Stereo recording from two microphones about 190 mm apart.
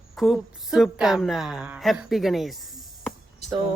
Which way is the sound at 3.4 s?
35° left (ahead or behind).